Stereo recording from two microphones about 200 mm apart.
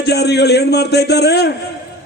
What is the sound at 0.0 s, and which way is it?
A man's voice, 55° left (ahead or behind).